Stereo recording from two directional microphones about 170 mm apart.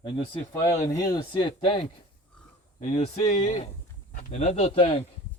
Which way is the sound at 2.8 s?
45° left (ahead or behind).